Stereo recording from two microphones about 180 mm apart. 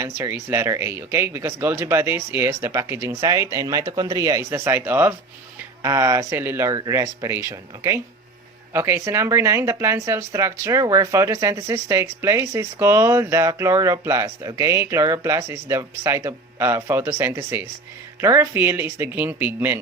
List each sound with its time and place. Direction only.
0.0 s speech: 15° right (ahead or behind)